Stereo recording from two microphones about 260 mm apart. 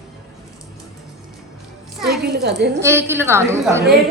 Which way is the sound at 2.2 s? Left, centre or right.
Right.